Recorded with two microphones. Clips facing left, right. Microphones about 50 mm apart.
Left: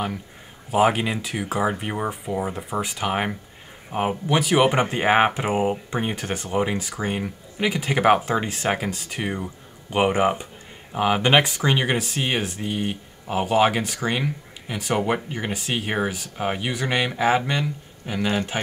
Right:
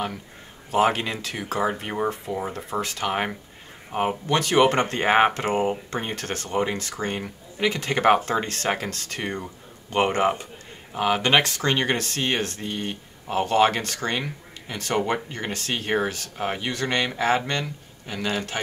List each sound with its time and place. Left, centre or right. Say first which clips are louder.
0.7 s speech: left 2 dB; centre